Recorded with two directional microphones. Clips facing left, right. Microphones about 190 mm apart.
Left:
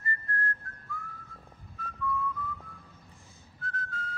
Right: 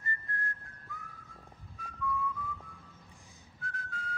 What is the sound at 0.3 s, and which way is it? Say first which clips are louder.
Whistling: left 6 dB; 15° right (ahead or behind).